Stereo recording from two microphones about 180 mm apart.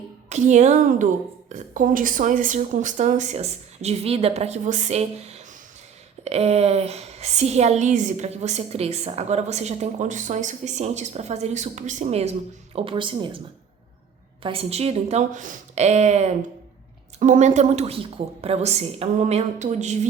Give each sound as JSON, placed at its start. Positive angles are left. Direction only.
{"t": 0.3, "sound": "a woman's voice", "side_deg": -40}
{"t": 14.4, "sound": "a woman's voice", "side_deg": -35}